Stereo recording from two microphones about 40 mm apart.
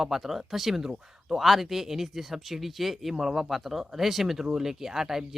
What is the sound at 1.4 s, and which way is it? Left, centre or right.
Speech, centre.